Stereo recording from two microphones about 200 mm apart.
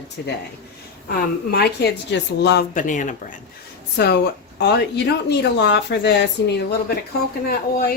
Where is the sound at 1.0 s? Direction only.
50° left (ahead or behind).